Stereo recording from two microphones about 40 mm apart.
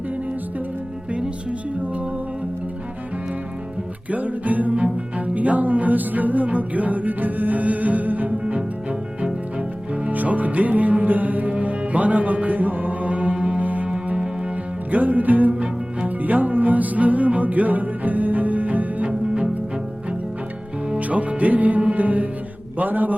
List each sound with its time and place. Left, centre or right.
4.1 s music: right
8.4 s music: right
10.1 s music: right
13.7 s music: right
15.5 s music: right
16.0 s music: right
19.0 s music: right
21.1 s music: right
22.8 s a man's voice: right